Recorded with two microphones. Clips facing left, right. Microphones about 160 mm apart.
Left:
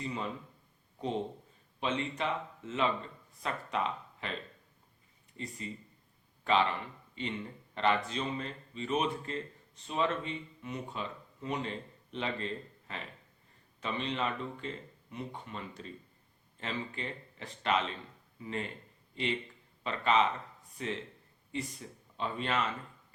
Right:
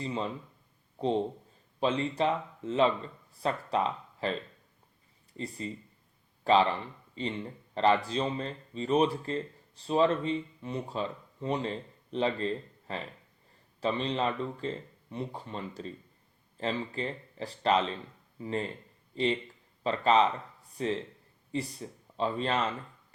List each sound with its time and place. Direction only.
0.0 s speech: 30° right (ahead or behind)
5.4 s speech: 35° right (ahead or behind)